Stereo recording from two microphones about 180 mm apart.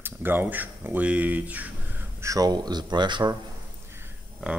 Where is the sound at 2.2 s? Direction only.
20° right (ahead or behind).